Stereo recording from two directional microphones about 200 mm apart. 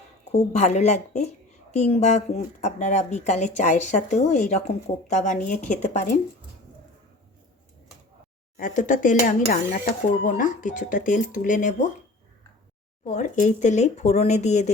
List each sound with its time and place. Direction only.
0.3 s speech: 35° left (ahead or behind)
8.5 s speech: 40° left (ahead or behind)
13.1 s speech: 35° left (ahead or behind)